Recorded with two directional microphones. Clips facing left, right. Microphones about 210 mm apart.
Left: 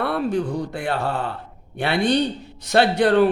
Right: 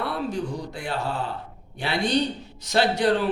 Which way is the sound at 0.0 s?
60° left (ahead or behind).